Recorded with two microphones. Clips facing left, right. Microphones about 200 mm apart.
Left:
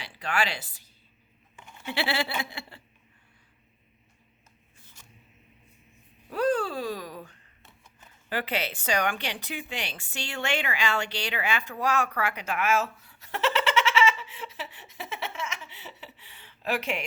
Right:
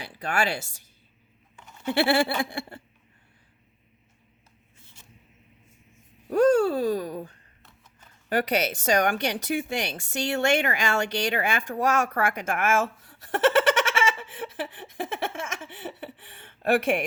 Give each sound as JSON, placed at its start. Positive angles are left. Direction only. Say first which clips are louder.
{"t": 0.1, "sound": "a woman's voice", "louder": "right 3 dB", "side_deg": -40}
{"t": 6.2, "sound": "speech", "louder": "right 7 dB", "side_deg": -45}
{"t": 8.3, "sound": "speech", "louder": "right 6 dB", "side_deg": -45}